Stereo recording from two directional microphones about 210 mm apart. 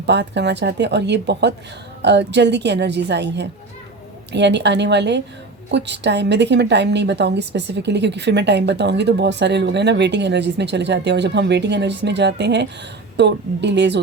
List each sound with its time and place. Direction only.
0.0 s a woman's voice: 55° right (ahead or behind)